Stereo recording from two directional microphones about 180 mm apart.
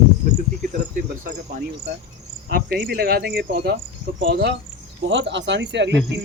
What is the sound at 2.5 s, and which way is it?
Speech, 55° right (ahead or behind).